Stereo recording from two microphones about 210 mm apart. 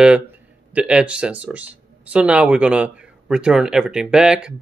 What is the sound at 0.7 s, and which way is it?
Speech, 5° right (ahead or behind).